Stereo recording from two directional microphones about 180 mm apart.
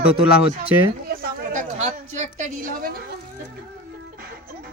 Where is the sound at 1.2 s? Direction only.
45° right (ahead or behind).